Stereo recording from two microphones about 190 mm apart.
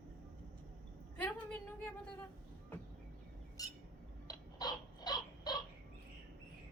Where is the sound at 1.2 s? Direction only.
10° left (ahead or behind).